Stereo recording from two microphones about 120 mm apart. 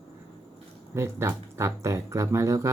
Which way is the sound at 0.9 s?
20° right (ahead or behind).